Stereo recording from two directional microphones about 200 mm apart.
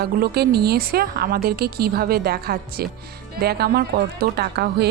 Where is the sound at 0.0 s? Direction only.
50° right (ahead or behind).